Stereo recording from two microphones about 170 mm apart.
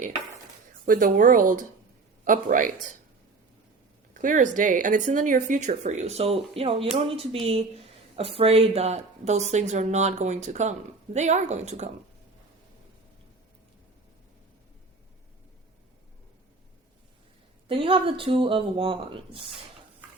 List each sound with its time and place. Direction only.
0.9 s speech: 50° right (ahead or behind)
4.2 s a woman's voice: 50° right (ahead or behind)
17.7 s a woman's voice: 30° right (ahead or behind)